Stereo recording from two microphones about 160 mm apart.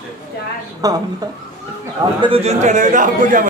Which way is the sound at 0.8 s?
20° right (ahead or behind).